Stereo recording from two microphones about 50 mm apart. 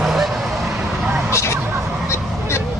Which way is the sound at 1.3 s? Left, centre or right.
Left.